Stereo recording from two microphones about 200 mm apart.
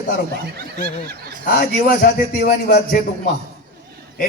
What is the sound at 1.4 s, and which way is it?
A man's voice, 45° left (ahead or behind).